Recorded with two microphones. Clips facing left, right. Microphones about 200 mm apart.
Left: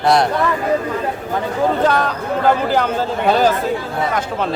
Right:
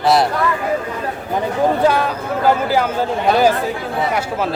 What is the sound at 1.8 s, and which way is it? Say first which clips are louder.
Speech: right 1 dB; 10° right (ahead or behind).